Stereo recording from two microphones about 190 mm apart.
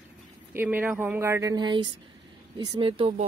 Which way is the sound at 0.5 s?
10° right (ahead or behind).